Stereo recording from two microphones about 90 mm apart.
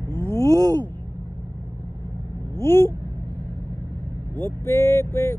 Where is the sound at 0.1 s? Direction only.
25° left (ahead or behind).